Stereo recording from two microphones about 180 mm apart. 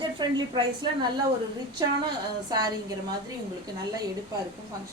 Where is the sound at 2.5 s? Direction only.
20° right (ahead or behind).